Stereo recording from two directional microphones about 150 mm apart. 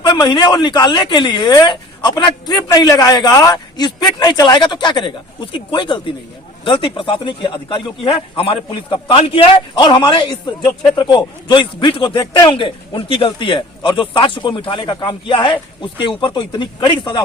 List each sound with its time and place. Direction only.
0.0 s a man's voice: 30° left (ahead or behind)